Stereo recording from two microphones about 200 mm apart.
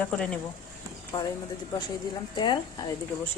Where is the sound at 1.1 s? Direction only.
20° left (ahead or behind).